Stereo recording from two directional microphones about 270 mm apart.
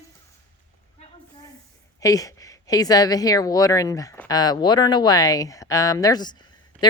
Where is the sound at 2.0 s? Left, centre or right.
Centre.